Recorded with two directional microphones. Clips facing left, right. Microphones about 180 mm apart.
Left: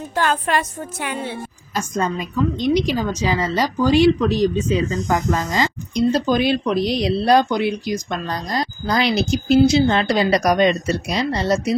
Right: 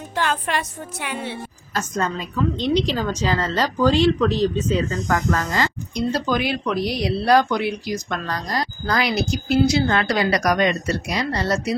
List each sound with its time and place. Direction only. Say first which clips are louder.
0.1 s a woman's voice: left 3 dB; 45° left (ahead or behind)
1.7 s a woman's voice: left 2 dB; 10° left (ahead or behind)